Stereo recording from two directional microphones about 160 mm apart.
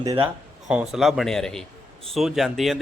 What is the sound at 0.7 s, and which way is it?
Speech, 5° right (ahead or behind).